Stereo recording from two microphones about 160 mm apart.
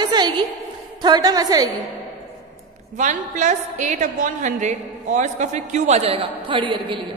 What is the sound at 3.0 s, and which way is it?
A woman's voice, 50° right (ahead or behind).